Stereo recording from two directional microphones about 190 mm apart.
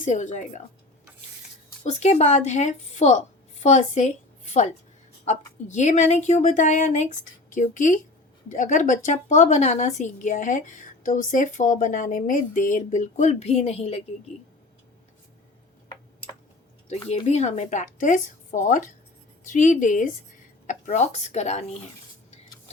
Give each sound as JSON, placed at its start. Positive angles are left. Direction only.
{"t": 0.0, "sound": "speech", "side_deg": 40}
{"t": 1.8, "sound": "a woman's voice", "side_deg": 35}
{"t": 17.2, "sound": "speech", "side_deg": 35}